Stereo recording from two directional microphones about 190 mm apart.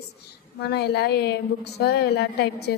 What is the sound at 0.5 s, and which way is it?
A woman's voice, 60° left (ahead or behind).